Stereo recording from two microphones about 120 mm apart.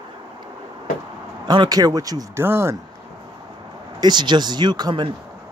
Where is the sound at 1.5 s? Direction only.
35° right (ahead or behind).